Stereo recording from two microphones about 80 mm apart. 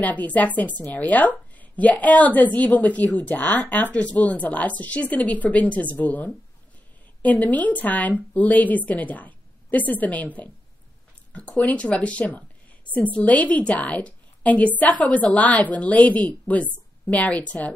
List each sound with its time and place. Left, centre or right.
0.0 s a woman's voice: centre